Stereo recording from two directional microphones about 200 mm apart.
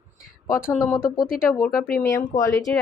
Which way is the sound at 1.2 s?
45° left (ahead or behind).